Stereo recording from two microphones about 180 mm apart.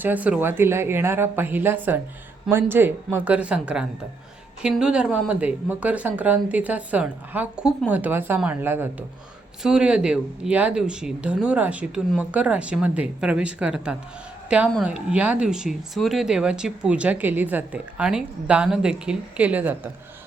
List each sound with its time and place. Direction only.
0.0 s speech: 10° right (ahead or behind)